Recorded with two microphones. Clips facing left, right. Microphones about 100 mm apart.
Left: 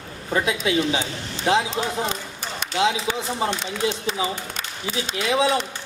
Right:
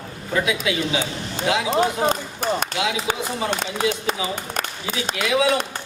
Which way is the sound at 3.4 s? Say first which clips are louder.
Right 3 dB; 50° right (ahead or behind).